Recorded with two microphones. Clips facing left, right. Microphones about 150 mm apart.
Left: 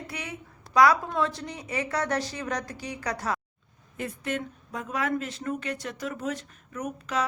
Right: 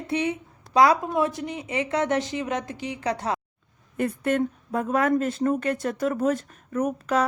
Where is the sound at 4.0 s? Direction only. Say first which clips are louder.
Right 8 dB; 55° right (ahead or behind).